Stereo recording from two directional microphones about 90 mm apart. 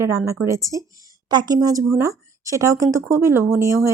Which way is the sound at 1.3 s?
50° right (ahead or behind).